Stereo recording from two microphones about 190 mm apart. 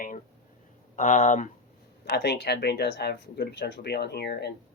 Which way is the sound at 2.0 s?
60° left (ahead or behind).